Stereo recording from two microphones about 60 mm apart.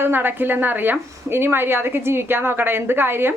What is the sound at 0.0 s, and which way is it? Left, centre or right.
A woman's voice, right.